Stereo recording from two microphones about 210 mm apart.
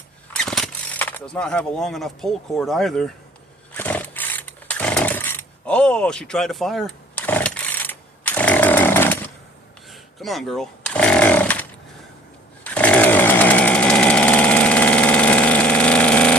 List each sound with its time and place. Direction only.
0.3 s speech: centre (ahead or behind)
3.7 s a sound: 10° left (ahead or behind)
9.9 s chainsaw: centre (ahead or behind)
12.6 s chainsaw: 5° left (ahead or behind)